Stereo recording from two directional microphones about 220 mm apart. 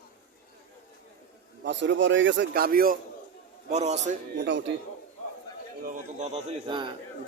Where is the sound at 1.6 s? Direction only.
55° right (ahead or behind).